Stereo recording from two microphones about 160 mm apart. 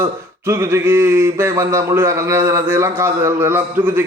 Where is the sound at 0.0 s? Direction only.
15° right (ahead or behind).